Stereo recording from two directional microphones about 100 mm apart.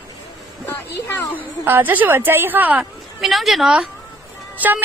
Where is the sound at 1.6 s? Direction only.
20° right (ahead or behind).